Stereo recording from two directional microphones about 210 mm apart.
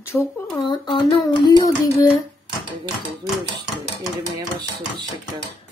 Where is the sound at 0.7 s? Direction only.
20° left (ahead or behind).